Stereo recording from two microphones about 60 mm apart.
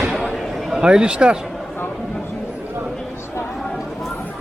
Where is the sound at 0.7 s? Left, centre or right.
Centre.